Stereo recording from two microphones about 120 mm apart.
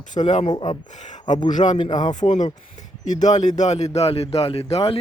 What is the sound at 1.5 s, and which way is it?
Speech, 90° left.